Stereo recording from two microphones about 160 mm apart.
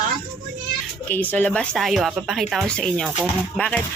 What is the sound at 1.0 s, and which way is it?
A woman's voice, 10° left (ahead or behind).